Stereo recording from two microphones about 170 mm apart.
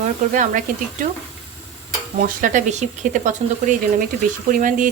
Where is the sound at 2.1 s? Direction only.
50° right (ahead or behind).